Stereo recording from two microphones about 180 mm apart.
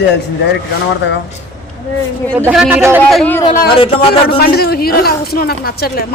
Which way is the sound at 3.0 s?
Centre (ahead or behind).